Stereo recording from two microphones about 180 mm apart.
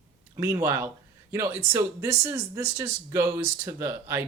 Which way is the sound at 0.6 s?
15° right (ahead or behind).